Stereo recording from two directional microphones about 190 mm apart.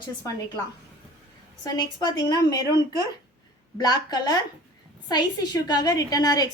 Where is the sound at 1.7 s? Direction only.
20° left (ahead or behind).